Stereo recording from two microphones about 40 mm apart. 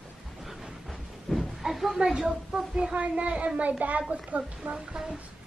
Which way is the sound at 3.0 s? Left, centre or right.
Right.